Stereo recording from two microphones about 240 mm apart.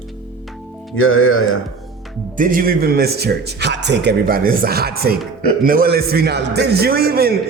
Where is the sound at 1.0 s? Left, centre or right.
Left.